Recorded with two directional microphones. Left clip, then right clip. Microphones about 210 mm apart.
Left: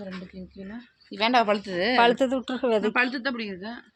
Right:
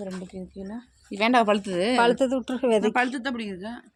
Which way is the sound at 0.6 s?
45° right (ahead or behind).